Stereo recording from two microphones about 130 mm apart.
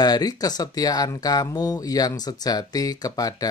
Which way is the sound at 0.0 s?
30° left (ahead or behind).